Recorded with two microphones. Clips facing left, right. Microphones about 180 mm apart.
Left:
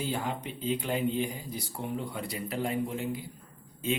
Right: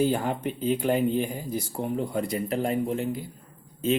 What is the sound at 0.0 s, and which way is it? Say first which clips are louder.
Speech: right 8 dB; 50° right (ahead or behind).